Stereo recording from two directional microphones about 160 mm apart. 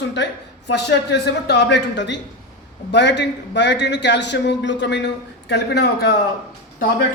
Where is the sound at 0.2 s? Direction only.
90° left.